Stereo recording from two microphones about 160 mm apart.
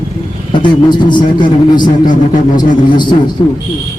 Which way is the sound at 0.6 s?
30° left (ahead or behind).